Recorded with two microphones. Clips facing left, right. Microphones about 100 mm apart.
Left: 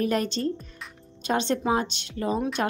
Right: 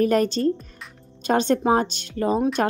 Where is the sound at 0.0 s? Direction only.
45° right (ahead or behind).